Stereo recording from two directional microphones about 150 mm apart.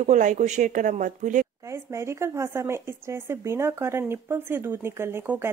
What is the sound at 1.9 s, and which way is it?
Speech, 20° right (ahead or behind).